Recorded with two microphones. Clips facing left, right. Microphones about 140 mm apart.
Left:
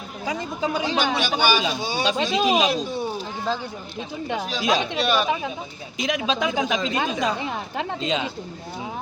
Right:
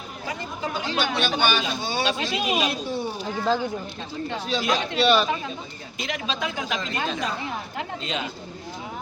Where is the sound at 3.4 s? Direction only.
5° right (ahead or behind).